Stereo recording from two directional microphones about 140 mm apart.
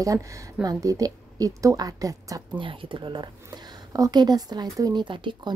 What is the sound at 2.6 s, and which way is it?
A woman's voice, 40° right (ahead or behind).